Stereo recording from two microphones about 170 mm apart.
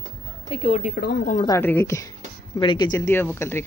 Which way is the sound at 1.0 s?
70° left (ahead or behind).